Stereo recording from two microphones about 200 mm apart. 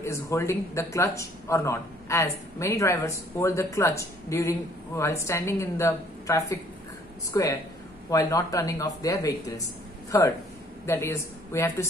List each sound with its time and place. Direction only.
0.0 s speech: 15° left (ahead or behind)